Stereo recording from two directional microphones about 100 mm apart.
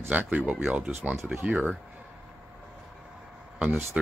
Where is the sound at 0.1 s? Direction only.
15° right (ahead or behind).